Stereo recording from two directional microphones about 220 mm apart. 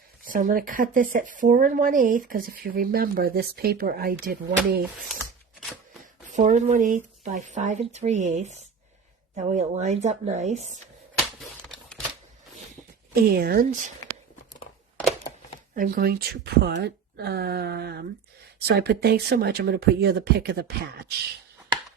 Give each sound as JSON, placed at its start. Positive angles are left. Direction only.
{"t": 0.3, "sound": "speech", "side_deg": -40}
{"t": 5.5, "sound": "a sound", "side_deg": 0}
{"t": 6.2, "sound": "speech", "side_deg": -35}
{"t": 11.3, "sound": "a sound", "side_deg": 0}
{"t": 13.2, "sound": "speech", "side_deg": -45}
{"t": 15.7, "sound": "speech", "side_deg": -40}